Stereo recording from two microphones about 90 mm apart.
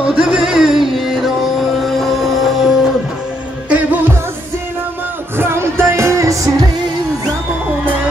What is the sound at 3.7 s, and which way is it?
Music, 20° right (ahead or behind).